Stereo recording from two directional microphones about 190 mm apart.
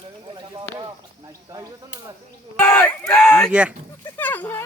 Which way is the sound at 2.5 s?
10° left (ahead or behind).